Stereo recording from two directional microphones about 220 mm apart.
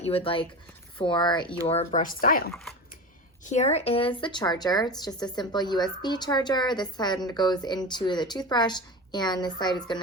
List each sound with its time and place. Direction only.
0.0 s a woman's voice: 25° left (ahead or behind)